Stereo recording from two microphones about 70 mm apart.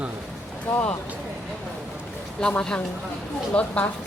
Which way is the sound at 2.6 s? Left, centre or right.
Centre.